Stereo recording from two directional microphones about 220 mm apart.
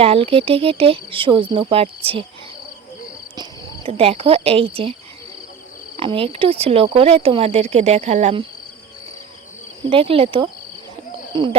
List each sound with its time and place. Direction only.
0.0 s speech: 25° right (ahead or behind)
3.8 s speech: 25° right (ahead or behind)
6.0 s speech: 25° right (ahead or behind)
9.8 s speech: 25° right (ahead or behind)